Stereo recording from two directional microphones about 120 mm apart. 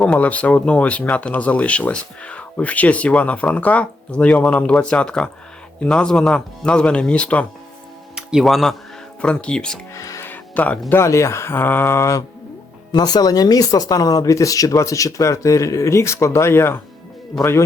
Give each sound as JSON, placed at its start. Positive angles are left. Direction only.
{"t": 0.0, "sound": "speech", "side_deg": 10}
{"t": 8.1, "sound": "speech", "side_deg": -5}
{"t": 9.9, "sound": "speech", "side_deg": 25}
{"t": 12.9, "sound": "speech", "side_deg": 35}